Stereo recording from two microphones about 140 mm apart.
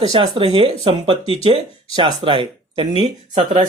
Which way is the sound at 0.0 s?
45° right (ahead or behind).